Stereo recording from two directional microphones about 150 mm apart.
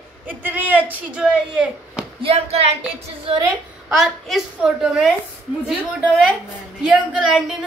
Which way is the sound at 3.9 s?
Centre (ahead or behind).